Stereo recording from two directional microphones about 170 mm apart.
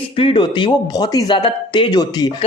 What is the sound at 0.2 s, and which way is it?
Speech, 30° left (ahead or behind).